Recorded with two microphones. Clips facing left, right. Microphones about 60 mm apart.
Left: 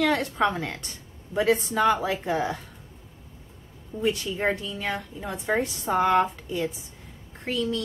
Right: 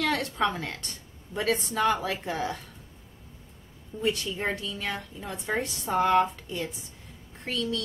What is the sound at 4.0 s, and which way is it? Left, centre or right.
Speech, centre.